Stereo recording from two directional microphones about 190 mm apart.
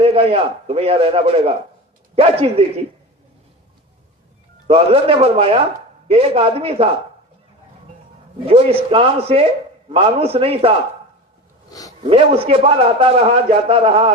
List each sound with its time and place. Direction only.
0.0 s a man's voice: 30° right (ahead or behind)
4.6 s a man's voice: 30° right (ahead or behind)
8.4 s a man's voice: 30° right (ahead or behind)
11.7 s speech: 20° left (ahead or behind)
11.9 s a man's voice: 30° right (ahead or behind)